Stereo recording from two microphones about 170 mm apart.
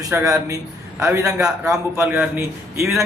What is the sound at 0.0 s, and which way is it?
A man's voice, 15° right (ahead or behind).